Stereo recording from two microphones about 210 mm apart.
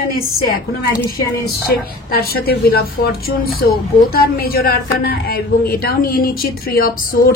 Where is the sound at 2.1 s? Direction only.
45° left (ahead or behind).